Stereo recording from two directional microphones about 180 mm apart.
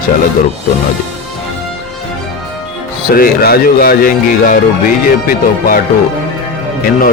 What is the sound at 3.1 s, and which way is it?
Speech, 55° left (ahead or behind).